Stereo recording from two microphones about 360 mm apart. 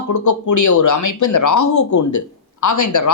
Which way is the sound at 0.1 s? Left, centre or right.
Left.